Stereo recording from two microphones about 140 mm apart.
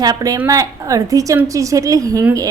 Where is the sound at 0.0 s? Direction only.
25° right (ahead or behind).